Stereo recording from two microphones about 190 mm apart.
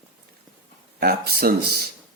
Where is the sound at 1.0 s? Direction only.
55° right (ahead or behind).